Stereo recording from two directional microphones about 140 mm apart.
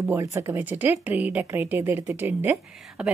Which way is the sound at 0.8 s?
10° right (ahead or behind).